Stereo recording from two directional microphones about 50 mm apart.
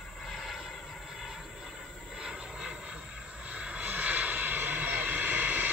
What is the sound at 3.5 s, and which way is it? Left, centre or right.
Vehicle, right.